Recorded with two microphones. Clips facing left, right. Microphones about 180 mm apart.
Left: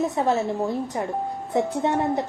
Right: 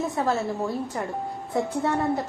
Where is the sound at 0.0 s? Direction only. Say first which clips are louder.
Left 3 dB; 20° left (ahead or behind).